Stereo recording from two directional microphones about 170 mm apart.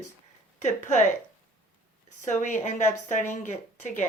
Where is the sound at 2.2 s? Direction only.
45° left (ahead or behind).